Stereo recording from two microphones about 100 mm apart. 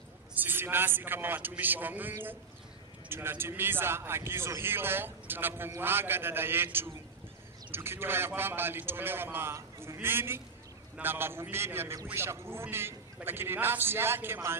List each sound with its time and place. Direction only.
0.3 s a man's voice: 20° right (ahead or behind)